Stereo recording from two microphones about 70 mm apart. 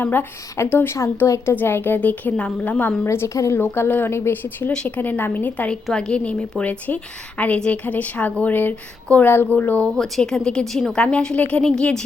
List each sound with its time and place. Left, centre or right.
0.0 s a woman's voice: left
3.0 s speech: left
3.2 s a woman's voice: left
5.9 s a woman's voice: centre
9.9 s a woman's voice: centre